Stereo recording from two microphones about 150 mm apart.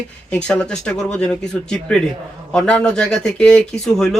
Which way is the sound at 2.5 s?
5° left (ahead or behind).